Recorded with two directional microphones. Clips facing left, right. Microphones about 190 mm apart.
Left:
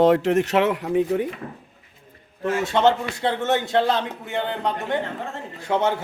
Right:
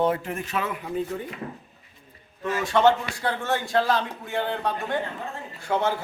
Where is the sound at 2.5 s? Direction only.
25° left (ahead or behind).